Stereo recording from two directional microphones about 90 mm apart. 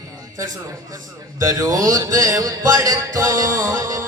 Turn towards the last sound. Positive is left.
turn(degrees=-40)  # may be behind; listen again after turning